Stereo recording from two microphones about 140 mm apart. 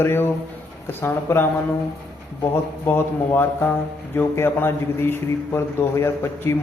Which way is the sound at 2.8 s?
15° left (ahead or behind).